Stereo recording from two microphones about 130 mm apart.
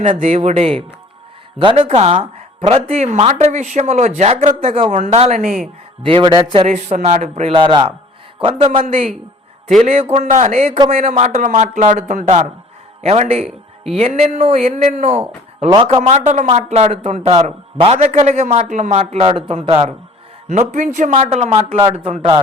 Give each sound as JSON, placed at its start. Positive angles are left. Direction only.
{"t": 0.1, "sound": "speech", "side_deg": -50}
{"t": 6.0, "sound": "speech", "side_deg": -45}
{"t": 6.7, "sound": "speech", "side_deg": -70}
{"t": 7.5, "sound": "a man's voice", "side_deg": -40}
{"t": 9.8, "sound": "speech", "side_deg": -55}
{"t": 13.0, "sound": "speech", "side_deg": -55}
{"t": 15.7, "sound": "speech", "side_deg": -40}
{"t": 20.5, "sound": "speech", "side_deg": -75}
{"t": 21.2, "sound": "speech", "side_deg": -55}